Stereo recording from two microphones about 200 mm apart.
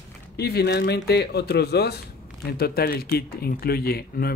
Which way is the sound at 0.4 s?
55° left (ahead or behind).